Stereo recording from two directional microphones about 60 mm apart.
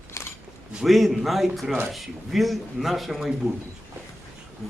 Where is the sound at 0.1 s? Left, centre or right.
Left.